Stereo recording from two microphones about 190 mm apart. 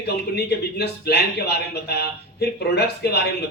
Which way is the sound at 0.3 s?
60° left (ahead or behind).